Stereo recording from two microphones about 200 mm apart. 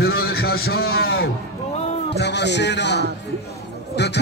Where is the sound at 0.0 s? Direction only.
50° left (ahead or behind).